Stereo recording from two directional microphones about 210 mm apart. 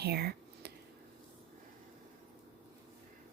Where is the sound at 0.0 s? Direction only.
50° right (ahead or behind).